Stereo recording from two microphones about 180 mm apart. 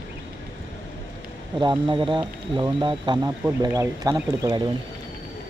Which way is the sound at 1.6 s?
25° right (ahead or behind).